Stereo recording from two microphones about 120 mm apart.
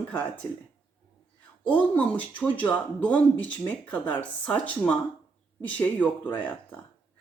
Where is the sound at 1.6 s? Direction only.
10° left (ahead or behind).